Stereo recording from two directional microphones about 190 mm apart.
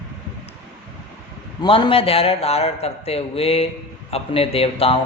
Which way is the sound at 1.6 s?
30° left (ahead or behind).